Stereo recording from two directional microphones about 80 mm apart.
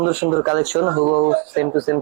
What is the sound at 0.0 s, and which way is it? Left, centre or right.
Speech, centre.